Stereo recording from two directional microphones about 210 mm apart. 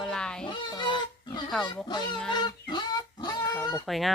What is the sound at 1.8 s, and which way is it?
Speech, 20° left (ahead or behind).